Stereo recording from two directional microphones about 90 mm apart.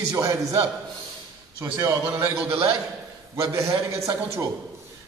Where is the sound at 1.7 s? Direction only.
35° right (ahead or behind).